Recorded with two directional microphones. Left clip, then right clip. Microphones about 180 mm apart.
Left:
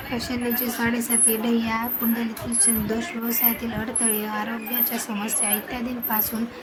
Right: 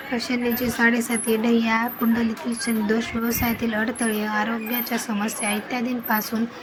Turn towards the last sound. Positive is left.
turn(degrees=-15)  # may be behind; listen again after turning